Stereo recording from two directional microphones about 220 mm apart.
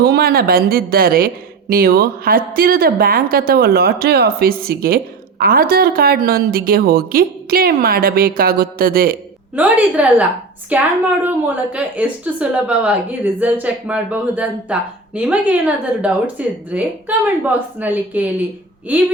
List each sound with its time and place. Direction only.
0.0 s a woman's voice: 45° right (ahead or behind)
9.6 s a woman's voice: 5° right (ahead or behind)